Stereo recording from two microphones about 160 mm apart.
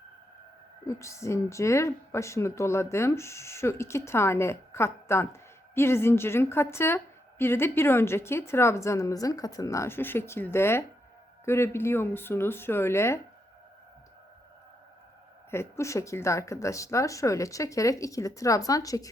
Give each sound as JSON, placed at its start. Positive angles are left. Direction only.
{"t": 0.9, "sound": "a woman's voice", "side_deg": 20}
{"t": 15.4, "sound": "speech", "side_deg": 15}